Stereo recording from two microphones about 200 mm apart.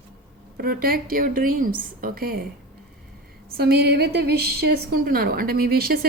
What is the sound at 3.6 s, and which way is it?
A woman's voice, 55° right (ahead or behind).